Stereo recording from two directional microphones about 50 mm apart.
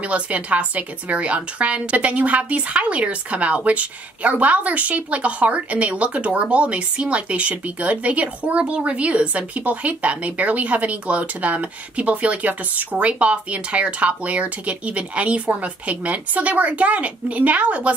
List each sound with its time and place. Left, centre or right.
0.0 s a woman's voice: right